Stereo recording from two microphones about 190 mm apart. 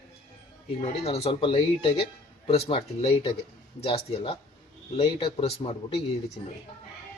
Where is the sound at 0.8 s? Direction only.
30° left (ahead or behind).